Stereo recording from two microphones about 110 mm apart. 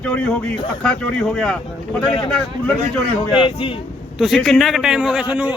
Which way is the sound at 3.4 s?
50° left (ahead or behind).